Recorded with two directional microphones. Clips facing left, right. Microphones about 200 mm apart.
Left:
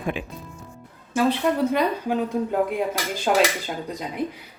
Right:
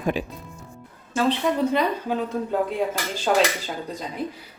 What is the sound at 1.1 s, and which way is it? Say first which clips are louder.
Speech: left 1 dB; 10° left (ahead or behind).